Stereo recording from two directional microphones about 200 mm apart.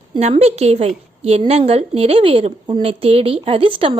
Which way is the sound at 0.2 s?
30° right (ahead or behind).